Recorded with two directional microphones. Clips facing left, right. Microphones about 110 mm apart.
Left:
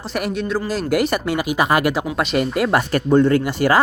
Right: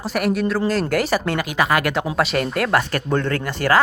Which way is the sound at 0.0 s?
Centre (ahead or behind).